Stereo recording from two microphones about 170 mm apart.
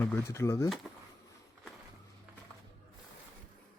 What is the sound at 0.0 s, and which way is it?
Speech, 15° left (ahead or behind).